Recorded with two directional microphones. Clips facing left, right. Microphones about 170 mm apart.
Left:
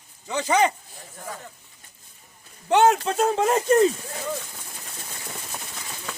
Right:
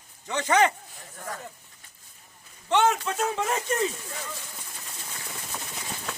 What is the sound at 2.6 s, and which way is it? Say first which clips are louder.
Speech: left 5 dB; 40° left (ahead or behind).